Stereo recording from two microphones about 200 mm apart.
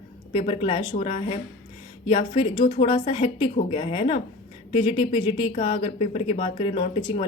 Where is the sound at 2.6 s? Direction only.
45° left (ahead or behind).